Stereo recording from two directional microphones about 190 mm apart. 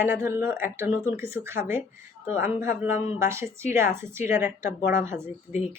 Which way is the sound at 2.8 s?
15° right (ahead or behind).